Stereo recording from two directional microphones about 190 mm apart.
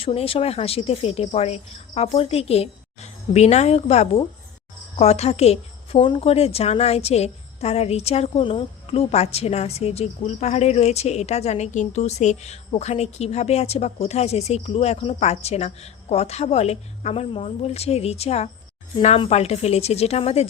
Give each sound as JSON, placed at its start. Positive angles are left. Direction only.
{"t": 0.0, "sound": "speech", "side_deg": 30}